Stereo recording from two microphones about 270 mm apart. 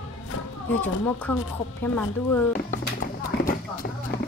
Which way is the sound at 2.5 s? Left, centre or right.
Left.